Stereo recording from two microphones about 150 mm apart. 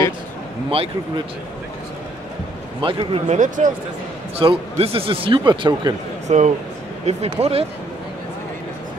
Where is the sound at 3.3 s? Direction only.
55° right (ahead or behind).